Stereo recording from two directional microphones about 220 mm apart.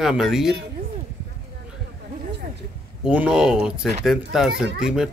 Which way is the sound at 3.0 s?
5° right (ahead or behind).